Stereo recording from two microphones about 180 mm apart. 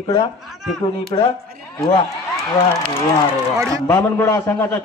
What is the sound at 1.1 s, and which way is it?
Speech, 25° left (ahead or behind).